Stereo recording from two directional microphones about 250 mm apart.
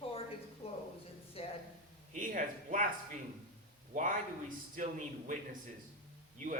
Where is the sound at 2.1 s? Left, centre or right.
Right.